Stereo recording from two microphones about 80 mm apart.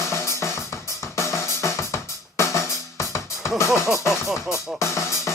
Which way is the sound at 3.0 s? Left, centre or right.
Left.